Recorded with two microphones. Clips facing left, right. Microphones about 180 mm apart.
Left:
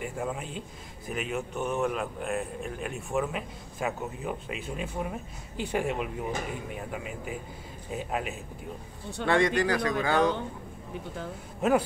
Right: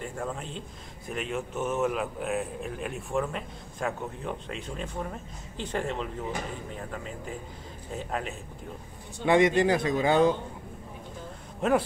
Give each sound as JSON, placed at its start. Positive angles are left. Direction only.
{"t": 0.0, "sound": "a man's voice", "side_deg": 10}
{"t": 9.2, "sound": "speech", "side_deg": -20}
{"t": 11.6, "sound": "a man's voice", "side_deg": 5}